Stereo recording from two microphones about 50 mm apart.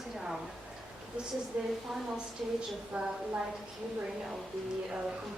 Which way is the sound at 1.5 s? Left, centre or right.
Centre.